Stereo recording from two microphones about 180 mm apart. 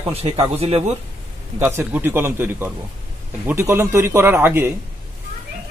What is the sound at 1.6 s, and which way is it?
A man's voice, 10° right (ahead or behind).